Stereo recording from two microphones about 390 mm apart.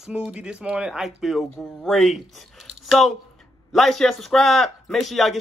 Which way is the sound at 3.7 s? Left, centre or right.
Centre.